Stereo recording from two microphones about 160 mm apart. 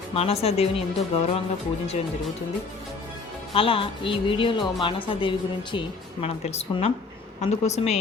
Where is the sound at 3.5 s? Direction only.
35° left (ahead or behind).